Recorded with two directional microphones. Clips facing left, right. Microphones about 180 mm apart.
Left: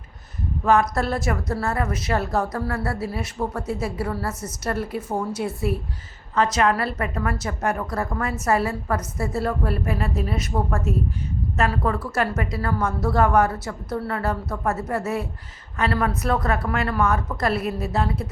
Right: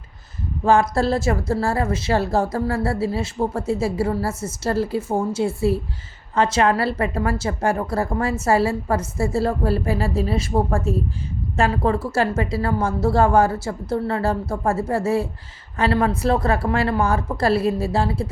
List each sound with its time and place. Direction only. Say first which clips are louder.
0.6 s a woman's voice: right 3 dB; 30° right (ahead or behind)